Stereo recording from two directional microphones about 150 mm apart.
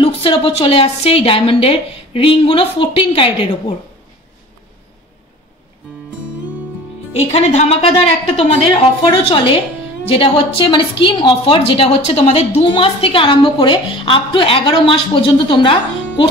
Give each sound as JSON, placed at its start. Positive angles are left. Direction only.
{"t": 0.0, "sound": "a woman's voice", "side_deg": 35}
{"t": 7.2, "sound": "a woman's voice", "side_deg": 45}